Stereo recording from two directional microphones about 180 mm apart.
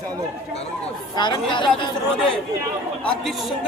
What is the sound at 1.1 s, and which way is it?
Speech, 25° left (ahead or behind).